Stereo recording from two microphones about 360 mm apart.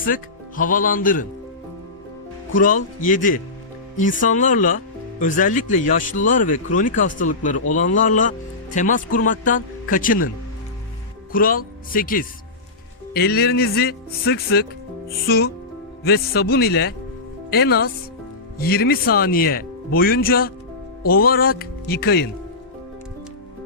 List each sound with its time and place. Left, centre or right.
0.0 s speech: left
2.5 s speech: left
11.3 s speech: left